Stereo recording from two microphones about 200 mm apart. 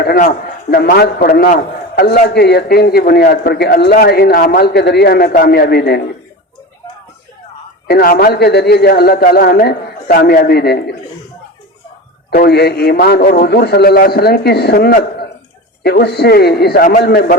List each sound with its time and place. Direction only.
0.0 s a man's voice: 50° left (ahead or behind)
7.9 s a man's voice: 45° left (ahead or behind)
12.3 s a man's voice: 50° left (ahead or behind)